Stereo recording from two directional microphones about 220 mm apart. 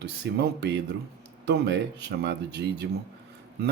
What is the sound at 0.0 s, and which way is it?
Speech, 50° right (ahead or behind).